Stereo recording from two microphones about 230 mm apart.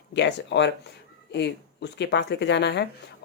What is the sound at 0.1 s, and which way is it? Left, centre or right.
Speech, left.